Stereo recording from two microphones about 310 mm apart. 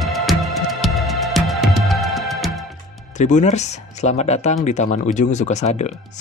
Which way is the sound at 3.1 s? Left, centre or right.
Left.